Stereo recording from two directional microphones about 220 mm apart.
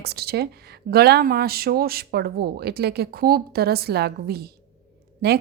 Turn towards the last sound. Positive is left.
turn(degrees=-45)  # may be behind; listen again after turning